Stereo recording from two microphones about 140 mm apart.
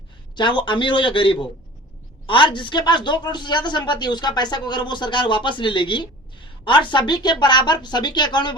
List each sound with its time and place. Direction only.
0.3 s speech: 35° left (ahead or behind)